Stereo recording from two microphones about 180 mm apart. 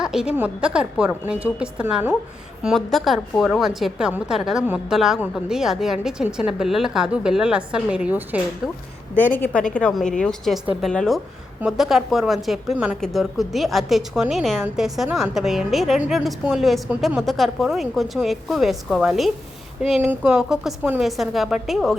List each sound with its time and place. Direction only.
0.0 s a woman's voice: 5° right (ahead or behind)
9.1 s a woman's voice: 10° left (ahead or behind)